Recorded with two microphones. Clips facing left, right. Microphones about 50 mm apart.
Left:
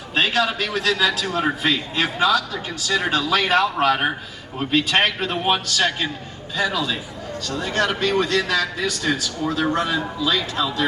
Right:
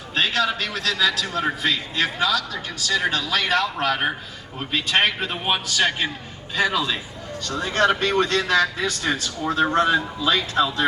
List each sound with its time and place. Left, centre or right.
0.1 s a man's voice: centre
1.6 s a man's voice: left
4.5 s a man's voice: centre
6.6 s speech: right